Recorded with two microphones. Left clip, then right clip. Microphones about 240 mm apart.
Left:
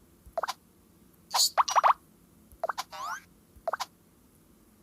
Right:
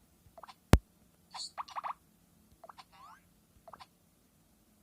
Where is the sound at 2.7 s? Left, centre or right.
Left.